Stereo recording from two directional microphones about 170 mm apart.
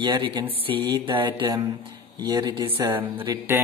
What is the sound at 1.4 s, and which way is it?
Speech, 15° right (ahead or behind).